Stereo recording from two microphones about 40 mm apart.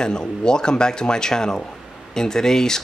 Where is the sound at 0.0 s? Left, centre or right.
Centre.